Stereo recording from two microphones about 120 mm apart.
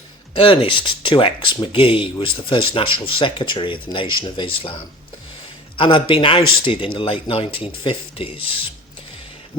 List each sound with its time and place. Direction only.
0.3 s speech: 45° left (ahead or behind)